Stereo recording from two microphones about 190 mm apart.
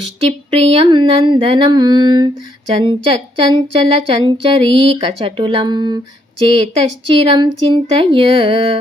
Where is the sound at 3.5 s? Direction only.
25° right (ahead or behind).